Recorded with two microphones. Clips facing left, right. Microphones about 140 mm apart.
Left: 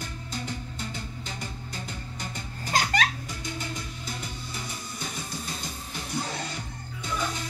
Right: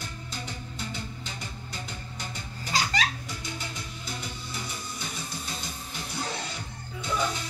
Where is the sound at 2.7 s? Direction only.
50° left (ahead or behind).